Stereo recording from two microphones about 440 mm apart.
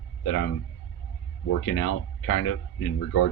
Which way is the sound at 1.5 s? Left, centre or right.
Left.